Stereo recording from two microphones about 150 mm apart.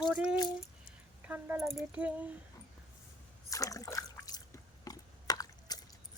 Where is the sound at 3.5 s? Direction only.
20° left (ahead or behind).